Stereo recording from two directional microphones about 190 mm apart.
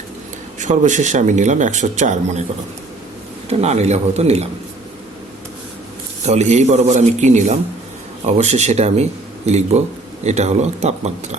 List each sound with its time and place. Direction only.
0.6 s speech: 40° right (ahead or behind)
3.6 s speech: 35° right (ahead or behind)
6.2 s speech: 35° right (ahead or behind)